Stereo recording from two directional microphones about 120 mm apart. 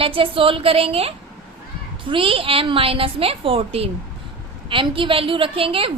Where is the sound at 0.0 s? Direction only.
50° right (ahead or behind).